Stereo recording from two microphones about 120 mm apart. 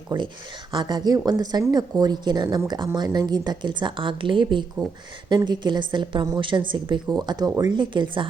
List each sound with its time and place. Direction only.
0.1 s speech: 40° right (ahead or behind)